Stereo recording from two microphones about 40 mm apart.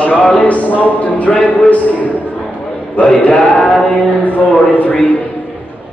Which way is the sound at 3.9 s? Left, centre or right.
Left.